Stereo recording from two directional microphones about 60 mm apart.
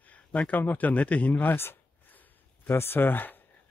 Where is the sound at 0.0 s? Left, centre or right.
Left.